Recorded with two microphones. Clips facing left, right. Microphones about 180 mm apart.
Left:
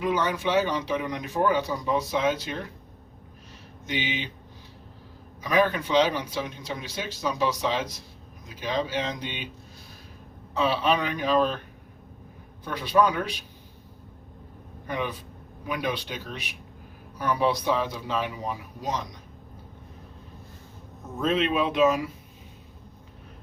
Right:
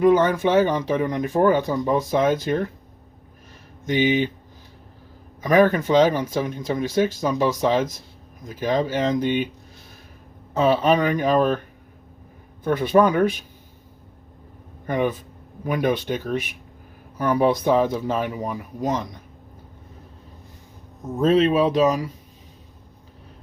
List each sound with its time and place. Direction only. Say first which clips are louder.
0.0 s speech: right 9 dB; 50° right (ahead or behind)
3.8 s speech: right 11 dB; 45° right (ahead or behind)
5.4 s speech: right 7 dB; 50° right (ahead or behind)
10.5 s speech: right 6 dB; 45° right (ahead or behind)
12.6 s speech: right 6 dB; 50° right (ahead or behind)
14.8 s speech: right 8 dB; 50° right (ahead or behind)
21.2 s speech: right 7 dB; 40° right (ahead or behind)